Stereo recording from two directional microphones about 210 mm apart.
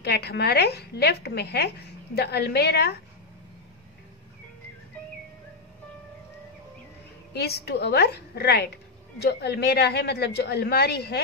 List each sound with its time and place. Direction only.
0.0 s a woman's voice: 50° left (ahead or behind)
7.3 s a woman's voice: 50° left (ahead or behind)